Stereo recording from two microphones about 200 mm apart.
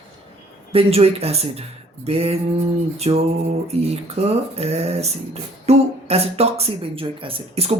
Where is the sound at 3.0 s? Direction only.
30° right (ahead or behind).